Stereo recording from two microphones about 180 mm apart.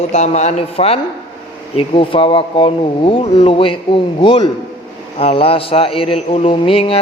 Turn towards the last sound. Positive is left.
turn(degrees=30)  # may be behind; listen again after turning